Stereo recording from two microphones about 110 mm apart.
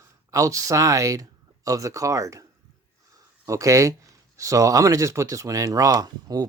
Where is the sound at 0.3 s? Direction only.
30° right (ahead or behind).